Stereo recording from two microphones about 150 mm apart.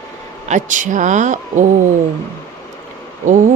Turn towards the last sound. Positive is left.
turn(degrees=-60)  # may be behind; listen again after turning